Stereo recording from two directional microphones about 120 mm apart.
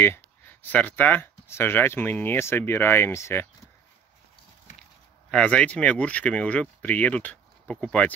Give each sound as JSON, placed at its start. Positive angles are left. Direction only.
{"t": 0.0, "sound": "speech", "side_deg": 20}
{"t": 5.3, "sound": "speech", "side_deg": 10}